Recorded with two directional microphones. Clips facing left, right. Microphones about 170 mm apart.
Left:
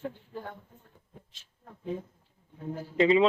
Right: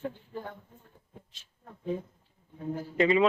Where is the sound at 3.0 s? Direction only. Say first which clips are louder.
Left 2 dB; 25° left (ahead or behind).